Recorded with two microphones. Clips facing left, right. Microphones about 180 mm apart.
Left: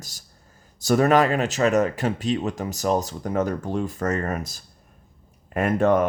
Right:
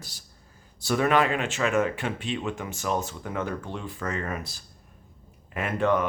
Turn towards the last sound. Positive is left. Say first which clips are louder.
# left 5 dB
turn(degrees=45)  # may be behind; listen again after turning